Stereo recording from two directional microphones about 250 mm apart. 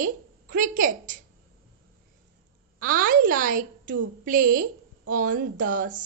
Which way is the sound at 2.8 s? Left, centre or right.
Right.